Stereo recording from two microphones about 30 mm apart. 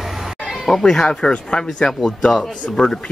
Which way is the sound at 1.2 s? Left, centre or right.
Left.